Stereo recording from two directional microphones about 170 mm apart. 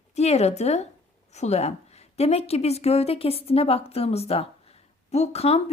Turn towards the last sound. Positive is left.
turn(degrees=35)  # may be behind; listen again after turning